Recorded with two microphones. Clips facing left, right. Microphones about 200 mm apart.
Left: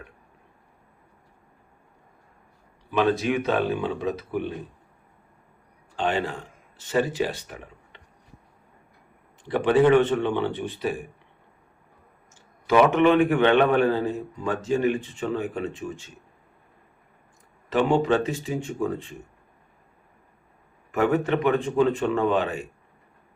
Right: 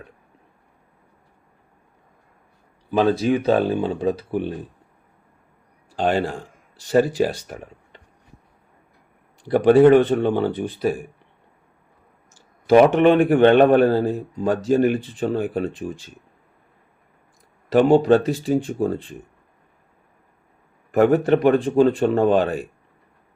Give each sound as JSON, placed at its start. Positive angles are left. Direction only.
{"t": 2.9, "sound": "speech", "side_deg": -35}
{"t": 6.0, "sound": "speech", "side_deg": -35}
{"t": 9.4, "sound": "speech", "side_deg": -35}
{"t": 12.6, "sound": "speech", "side_deg": -35}
{"t": 17.7, "sound": "speech", "side_deg": -35}
{"t": 21.5, "sound": "speech", "side_deg": -35}